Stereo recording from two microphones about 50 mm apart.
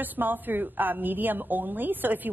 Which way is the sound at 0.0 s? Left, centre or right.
Right.